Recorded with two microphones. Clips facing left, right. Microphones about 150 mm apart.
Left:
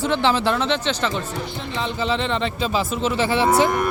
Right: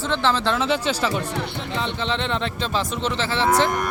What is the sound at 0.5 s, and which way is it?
Speech, 5° right (ahead or behind).